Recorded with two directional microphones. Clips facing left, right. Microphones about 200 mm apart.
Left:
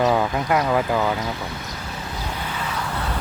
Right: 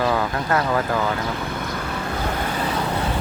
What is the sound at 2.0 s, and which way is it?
Vehicle, 60° right (ahead or behind).